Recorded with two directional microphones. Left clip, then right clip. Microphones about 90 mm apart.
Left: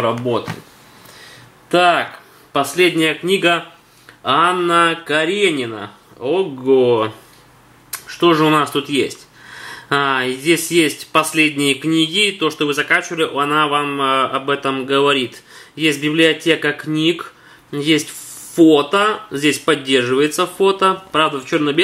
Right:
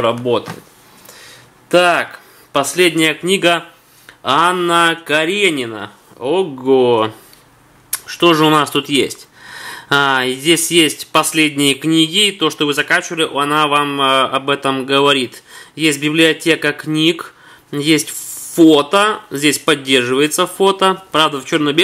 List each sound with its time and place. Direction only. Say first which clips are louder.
0.2 s speech: right 3 dB; 25° right (ahead or behind)
1.7 s a man's voice: right 2 dB; 30° right (ahead or behind)
9.9 s speech: right 3 dB; 45° right (ahead or behind)
10.2 s a man's voice: right 2 dB; 30° right (ahead or behind)
12.7 s speech: left 1 dB; 60° right (ahead or behind)
13.1 s a man's voice: right 1 dB; 35° right (ahead or behind)